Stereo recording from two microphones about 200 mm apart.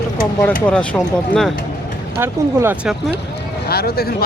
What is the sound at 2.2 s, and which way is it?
Speech, 10° right (ahead or behind).